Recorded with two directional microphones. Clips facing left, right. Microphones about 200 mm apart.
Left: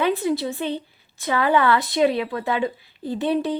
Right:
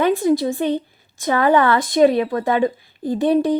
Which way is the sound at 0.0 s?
45° right (ahead or behind).